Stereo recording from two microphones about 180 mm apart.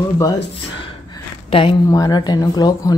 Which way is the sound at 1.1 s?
30° left (ahead or behind).